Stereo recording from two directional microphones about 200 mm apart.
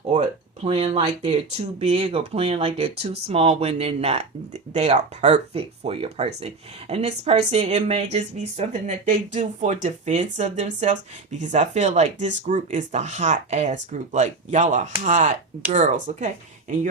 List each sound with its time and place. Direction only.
0.1 s speech: 30° right (ahead or behind)